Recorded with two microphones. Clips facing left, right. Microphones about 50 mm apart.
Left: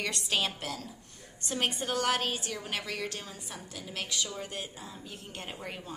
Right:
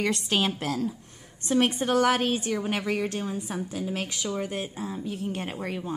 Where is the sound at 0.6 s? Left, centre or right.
Centre.